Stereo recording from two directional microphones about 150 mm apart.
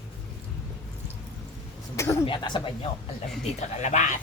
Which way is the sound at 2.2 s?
30° left (ahead or behind).